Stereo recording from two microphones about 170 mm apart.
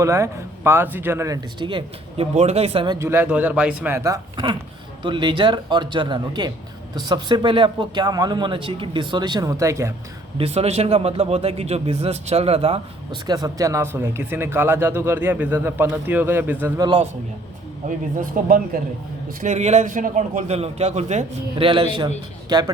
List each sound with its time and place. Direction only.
0.0 s speech: 15° right (ahead or behind)
2.3 s a man's voice: 40° right (ahead or behind)
3.0 s speech: 10° right (ahead or behind)
10.3 s a man's voice: 35° right (ahead or behind)
13.2 s speech: 25° right (ahead or behind)
16.8 s speech: 30° right (ahead or behind)
18.4 s speech: 55° right (ahead or behind)
19.4 s a man's voice: 45° right (ahead or behind)
21.7 s speech: 30° right (ahead or behind)